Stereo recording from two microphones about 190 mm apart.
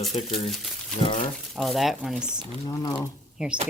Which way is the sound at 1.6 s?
Centre (ahead or behind).